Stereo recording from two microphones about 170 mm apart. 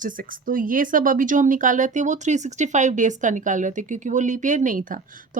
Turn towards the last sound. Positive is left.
turn(degrees=-50)  # may be behind; listen again after turning